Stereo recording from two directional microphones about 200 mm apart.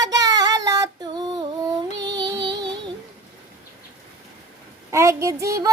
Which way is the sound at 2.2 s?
20° right (ahead or behind).